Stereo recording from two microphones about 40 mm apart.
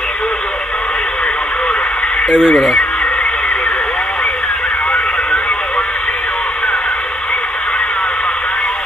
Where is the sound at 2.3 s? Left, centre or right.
Centre.